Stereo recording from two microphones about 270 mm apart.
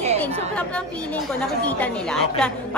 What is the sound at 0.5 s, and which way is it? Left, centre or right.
Speech, centre.